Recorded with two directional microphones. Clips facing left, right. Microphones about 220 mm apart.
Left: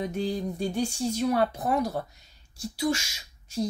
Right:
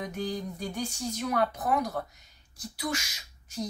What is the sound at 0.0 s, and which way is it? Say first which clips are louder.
Speech: left 4 dB; 30° left (ahead or behind).